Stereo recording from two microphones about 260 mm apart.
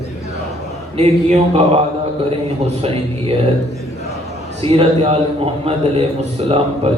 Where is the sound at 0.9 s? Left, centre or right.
Right.